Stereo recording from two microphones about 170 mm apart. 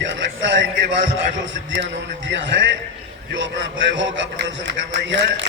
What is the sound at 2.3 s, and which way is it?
Speech, 90° right.